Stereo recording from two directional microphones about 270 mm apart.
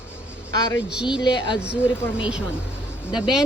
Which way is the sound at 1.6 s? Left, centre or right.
Centre.